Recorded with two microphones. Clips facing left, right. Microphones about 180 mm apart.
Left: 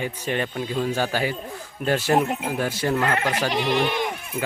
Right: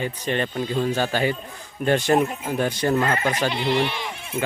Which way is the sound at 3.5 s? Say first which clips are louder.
Left 1 dB; 45° left (ahead or behind).